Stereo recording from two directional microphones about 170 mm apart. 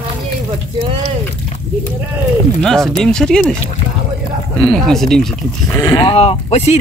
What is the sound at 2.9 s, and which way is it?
Speech, 5° left (ahead or behind).